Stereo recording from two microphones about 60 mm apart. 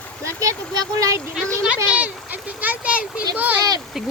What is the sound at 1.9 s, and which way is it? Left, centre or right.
A child's voice, right.